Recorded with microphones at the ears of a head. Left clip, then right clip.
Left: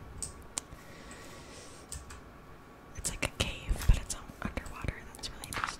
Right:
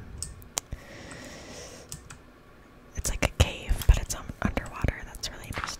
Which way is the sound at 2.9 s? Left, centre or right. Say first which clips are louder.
Right 6 dB; right.